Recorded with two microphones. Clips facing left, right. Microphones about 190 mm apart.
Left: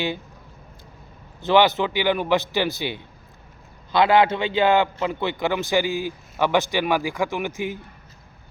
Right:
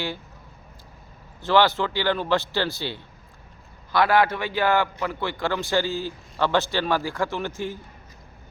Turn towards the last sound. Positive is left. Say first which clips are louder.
# left 2 dB
turn(degrees=15)  # may be behind; listen again after turning